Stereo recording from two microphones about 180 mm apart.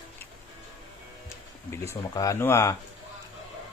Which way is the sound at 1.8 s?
15° left (ahead or behind).